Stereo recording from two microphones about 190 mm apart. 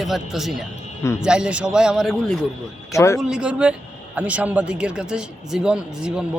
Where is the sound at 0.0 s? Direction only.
Centre (ahead or behind).